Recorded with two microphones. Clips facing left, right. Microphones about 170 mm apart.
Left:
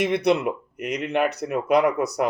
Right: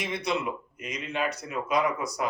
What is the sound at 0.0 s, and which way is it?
Speech, 65° left (ahead or behind).